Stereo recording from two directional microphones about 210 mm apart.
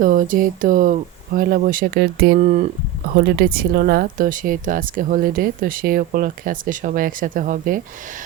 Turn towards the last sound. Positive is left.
turn(degrees=-40)  # may be behind; listen again after turning